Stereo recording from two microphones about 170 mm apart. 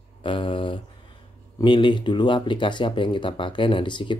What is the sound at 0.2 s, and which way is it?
Speech, 30° left (ahead or behind).